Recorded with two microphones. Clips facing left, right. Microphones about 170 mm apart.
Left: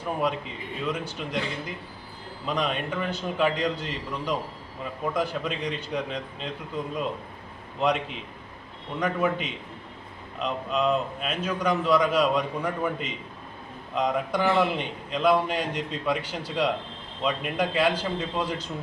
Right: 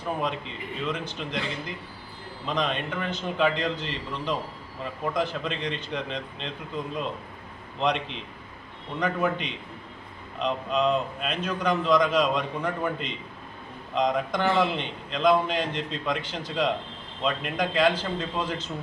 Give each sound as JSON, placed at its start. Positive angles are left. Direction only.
{"t": 0.9, "sound": "a man's voice", "side_deg": 10}
{"t": 2.5, "sound": "a man's voice", "side_deg": 10}